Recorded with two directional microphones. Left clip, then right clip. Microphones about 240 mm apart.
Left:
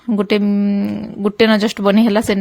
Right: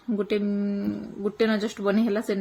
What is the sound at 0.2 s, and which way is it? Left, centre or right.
Speech, left.